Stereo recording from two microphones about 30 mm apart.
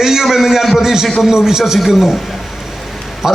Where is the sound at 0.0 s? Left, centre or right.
Centre.